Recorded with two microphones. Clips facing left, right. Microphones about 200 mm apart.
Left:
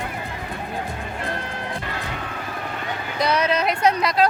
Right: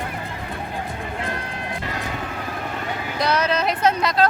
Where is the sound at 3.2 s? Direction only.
Centre (ahead or behind).